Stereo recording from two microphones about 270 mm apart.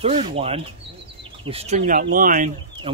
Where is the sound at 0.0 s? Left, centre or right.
Right.